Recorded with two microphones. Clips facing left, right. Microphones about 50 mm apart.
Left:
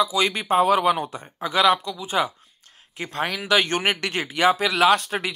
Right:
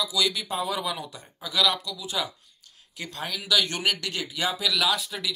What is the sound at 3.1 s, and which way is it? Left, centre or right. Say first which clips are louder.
Speech: left 8 dB; left.